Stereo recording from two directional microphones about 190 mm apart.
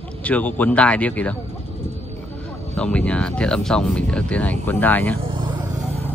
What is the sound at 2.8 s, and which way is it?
Speech, 5° left (ahead or behind).